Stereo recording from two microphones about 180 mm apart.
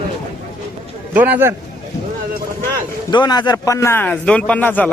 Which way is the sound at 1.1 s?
10° right (ahead or behind).